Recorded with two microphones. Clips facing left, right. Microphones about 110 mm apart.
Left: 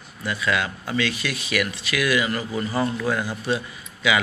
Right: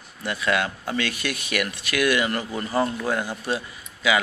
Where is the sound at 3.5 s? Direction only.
35° right (ahead or behind).